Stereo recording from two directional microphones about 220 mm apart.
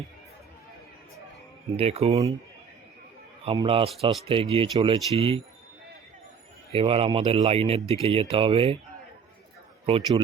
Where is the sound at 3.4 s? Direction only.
25° right (ahead or behind).